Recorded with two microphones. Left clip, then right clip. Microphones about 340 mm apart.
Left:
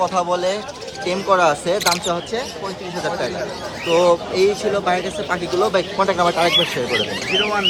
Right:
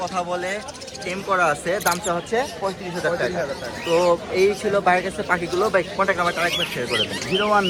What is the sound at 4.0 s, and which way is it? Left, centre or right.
Speech, centre.